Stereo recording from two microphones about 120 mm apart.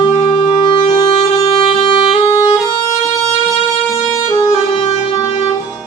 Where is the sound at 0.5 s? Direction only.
35° left (ahead or behind).